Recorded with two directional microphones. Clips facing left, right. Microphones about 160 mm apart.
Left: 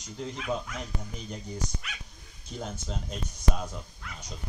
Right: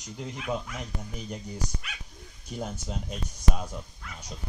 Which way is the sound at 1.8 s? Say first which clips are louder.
Right 1 dB; centre (ahead or behind).